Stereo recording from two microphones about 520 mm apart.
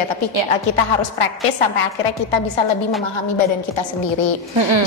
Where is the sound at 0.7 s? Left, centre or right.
Left.